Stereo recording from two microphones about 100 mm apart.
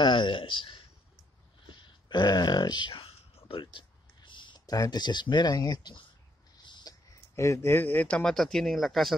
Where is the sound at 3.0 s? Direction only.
70° left (ahead or behind); by 4.8 s 50° left (ahead or behind).